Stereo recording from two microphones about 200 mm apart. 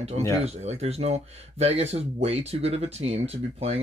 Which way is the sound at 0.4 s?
35° right (ahead or behind).